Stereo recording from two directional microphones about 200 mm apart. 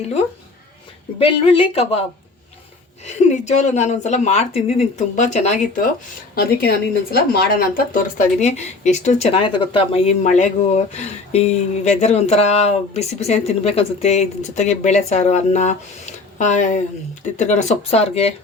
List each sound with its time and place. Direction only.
1.2 s speech: 25° left (ahead or behind)
3.1 s speech: 35° left (ahead or behind)
6.3 s speech: 50° left (ahead or behind); by 18.3 s 30° left (ahead or behind)